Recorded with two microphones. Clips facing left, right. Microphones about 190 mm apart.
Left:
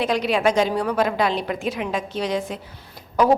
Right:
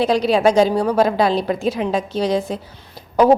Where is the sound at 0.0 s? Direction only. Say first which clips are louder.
Right 5 dB; 35° right (ahead or behind).